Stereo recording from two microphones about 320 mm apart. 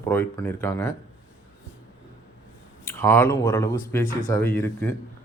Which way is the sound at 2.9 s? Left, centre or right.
Centre.